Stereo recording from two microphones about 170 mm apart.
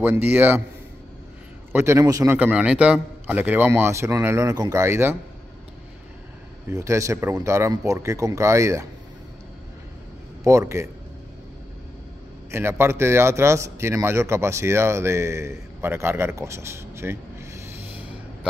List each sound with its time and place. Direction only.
0.0 s a man's voice: 10° right (ahead or behind)
1.7 s a man's voice: 15° right (ahead or behind)
6.7 s a man's voice: 20° right (ahead or behind)
10.4 s a man's voice: 15° right (ahead or behind)
12.4 s a man's voice: 15° right (ahead or behind)
17.9 s gasp: 10° right (ahead or behind)